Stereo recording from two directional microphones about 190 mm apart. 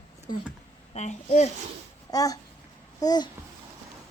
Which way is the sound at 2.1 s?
20° left (ahead or behind).